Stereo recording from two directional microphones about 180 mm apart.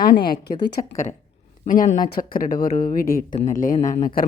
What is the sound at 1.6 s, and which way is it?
Speech, 50° left (ahead or behind).